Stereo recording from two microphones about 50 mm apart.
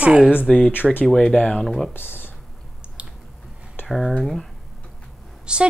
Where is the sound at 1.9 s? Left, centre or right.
Left.